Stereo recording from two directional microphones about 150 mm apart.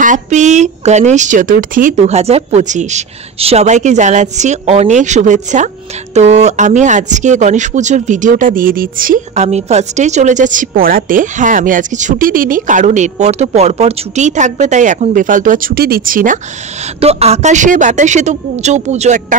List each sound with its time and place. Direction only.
0.0 s a woman's voice: 55° right (ahead or behind)
9.3 s a woman's voice: 45° right (ahead or behind); by 16.3 s 65° right (ahead or behind)
17.0 s speech: 45° right (ahead or behind)